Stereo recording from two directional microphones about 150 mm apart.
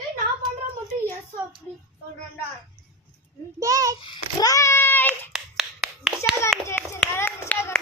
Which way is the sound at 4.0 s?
30° left (ahead or behind).